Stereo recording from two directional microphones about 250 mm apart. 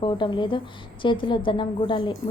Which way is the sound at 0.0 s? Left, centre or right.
Centre.